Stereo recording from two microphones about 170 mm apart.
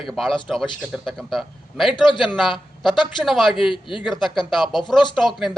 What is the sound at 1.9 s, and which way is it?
Speech, 25° left (ahead or behind).